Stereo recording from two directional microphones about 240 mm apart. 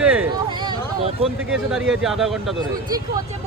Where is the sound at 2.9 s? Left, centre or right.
Centre.